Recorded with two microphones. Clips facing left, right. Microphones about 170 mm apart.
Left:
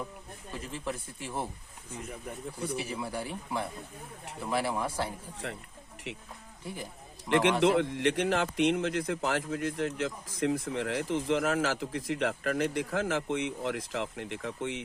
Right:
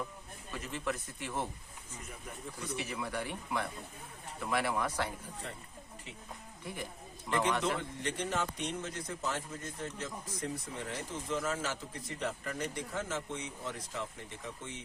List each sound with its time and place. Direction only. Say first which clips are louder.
0.5 s speech: left 1 dB; 30° left (ahead or behind)
2.6 s speech: left 4 dB; 30° left (ahead or behind)
5.4 s a man's voice: left 6 dB; 75° left (ahead or behind)
7.3 s a man's voice: left 7 dB; 85° left